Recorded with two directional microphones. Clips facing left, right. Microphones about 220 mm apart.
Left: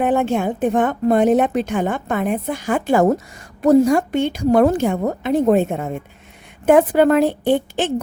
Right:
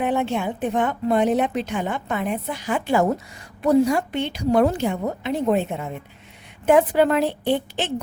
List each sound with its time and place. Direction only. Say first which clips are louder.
0.0 s a woman's voice: left 5 dB; 45° left (ahead or behind)